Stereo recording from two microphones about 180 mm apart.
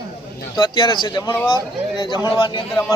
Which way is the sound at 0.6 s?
25° left (ahead or behind).